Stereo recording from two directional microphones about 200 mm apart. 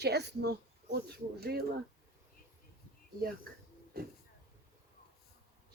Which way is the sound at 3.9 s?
50° right (ahead or behind).